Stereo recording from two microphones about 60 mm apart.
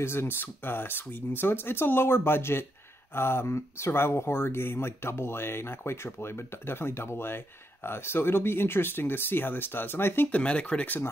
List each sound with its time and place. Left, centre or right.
0.0 s speech: left
10.3 s speech: centre